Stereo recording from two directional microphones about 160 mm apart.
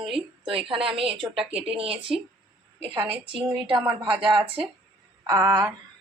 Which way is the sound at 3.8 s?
10° right (ahead or behind).